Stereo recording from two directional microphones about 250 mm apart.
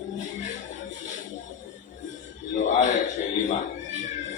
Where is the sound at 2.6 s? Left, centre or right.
Left.